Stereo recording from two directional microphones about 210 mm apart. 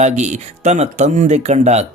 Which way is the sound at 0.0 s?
35° right (ahead or behind).